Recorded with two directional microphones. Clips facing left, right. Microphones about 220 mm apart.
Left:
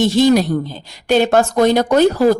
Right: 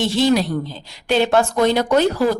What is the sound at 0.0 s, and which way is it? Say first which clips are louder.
A woman's voice: left 4 dB; 45° left (ahead or behind).